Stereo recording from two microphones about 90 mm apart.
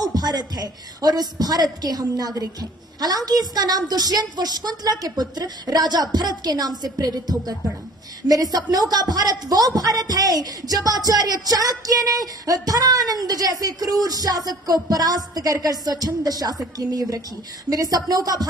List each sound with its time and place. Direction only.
0.0 s speech: 50° right (ahead or behind)